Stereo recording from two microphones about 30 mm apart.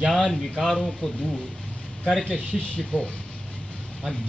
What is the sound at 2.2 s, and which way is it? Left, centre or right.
Speech, left.